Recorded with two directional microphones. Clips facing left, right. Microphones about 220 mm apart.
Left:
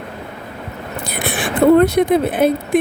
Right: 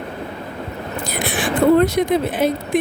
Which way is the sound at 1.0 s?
60° left (ahead or behind).